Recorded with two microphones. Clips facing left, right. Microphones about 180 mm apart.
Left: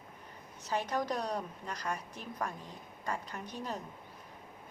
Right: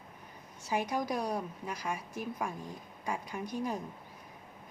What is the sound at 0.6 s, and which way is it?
A woman's voice, 10° right (ahead or behind).